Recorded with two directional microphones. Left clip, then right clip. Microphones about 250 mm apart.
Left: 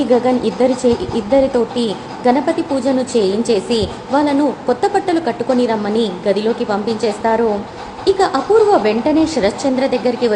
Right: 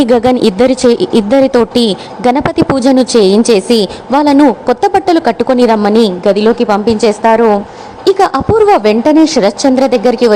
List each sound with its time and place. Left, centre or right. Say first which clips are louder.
0.0 s a woman's voice: right 6 dB; right